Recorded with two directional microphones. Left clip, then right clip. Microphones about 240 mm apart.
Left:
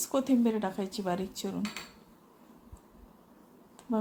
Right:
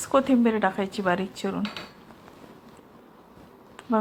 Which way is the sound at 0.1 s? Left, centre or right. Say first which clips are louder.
Right 8 dB; centre.